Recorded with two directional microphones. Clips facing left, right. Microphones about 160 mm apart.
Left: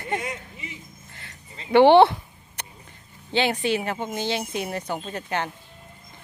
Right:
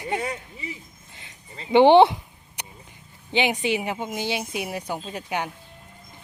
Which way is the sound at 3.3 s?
15° right (ahead or behind).